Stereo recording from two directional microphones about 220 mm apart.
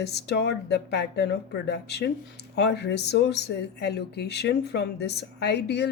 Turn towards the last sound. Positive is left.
turn(degrees=50)  # may be behind; listen again after turning